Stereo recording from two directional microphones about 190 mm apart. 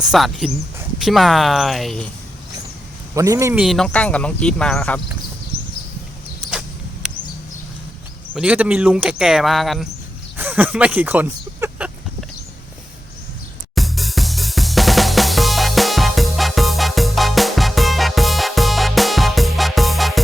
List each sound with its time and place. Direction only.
0.0 s speech: centre (ahead or behind)
3.2 s a man's voice: 15° right (ahead or behind)
3.6 s speech: centre (ahead or behind)
8.4 s speech: 5° right (ahead or behind)
13.7 s music: centre (ahead or behind)